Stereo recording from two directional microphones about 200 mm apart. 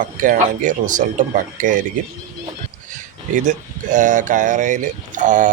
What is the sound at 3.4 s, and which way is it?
Speech, 40° right (ahead or behind).